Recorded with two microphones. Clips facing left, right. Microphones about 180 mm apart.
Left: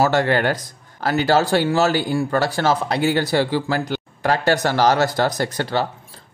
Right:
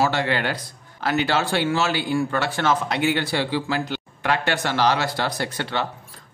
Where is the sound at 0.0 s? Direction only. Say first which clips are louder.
Left 5 dB; 45° left (ahead or behind).